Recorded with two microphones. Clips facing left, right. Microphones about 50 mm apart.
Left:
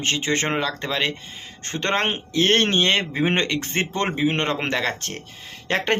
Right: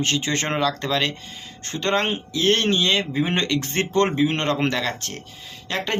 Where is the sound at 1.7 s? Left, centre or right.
Left.